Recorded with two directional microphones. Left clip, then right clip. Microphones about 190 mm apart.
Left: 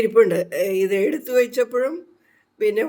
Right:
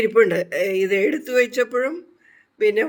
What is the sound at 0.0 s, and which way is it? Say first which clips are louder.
A man's voice: left 1 dB; centre (ahead or behind).